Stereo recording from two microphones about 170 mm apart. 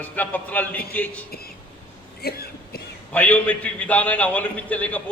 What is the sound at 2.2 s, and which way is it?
Cough, 65° left (ahead or behind).